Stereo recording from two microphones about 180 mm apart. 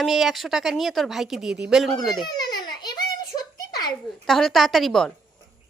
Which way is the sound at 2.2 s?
20° left (ahead or behind).